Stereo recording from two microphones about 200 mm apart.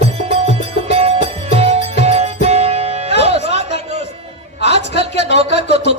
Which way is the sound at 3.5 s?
30° right (ahead or behind).